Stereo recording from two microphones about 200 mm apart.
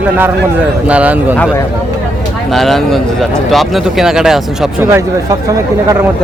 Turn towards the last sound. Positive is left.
turn(degrees=-15)  # may be behind; listen again after turning